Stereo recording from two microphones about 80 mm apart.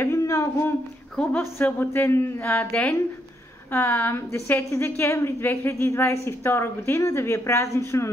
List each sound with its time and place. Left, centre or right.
0.0 s a sound: left
1.3 s a woman's voice: left
4.3 s a woman's voice: left